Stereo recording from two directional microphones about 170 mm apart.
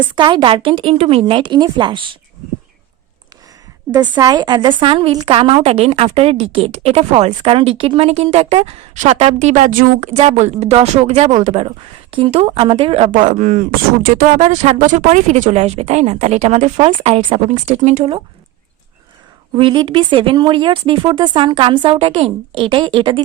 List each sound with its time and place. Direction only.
0.2 s a woman's voice: 25° right (ahead or behind)
4.2 s a woman's voice: 25° right (ahead or behind)
13.1 s speech: 45° right (ahead or behind)
19.5 s a woman's voice: 30° right (ahead or behind)